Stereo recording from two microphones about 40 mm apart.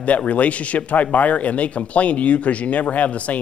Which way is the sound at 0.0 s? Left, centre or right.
Left.